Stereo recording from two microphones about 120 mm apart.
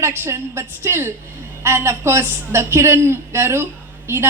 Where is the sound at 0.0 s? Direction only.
20° right (ahead or behind).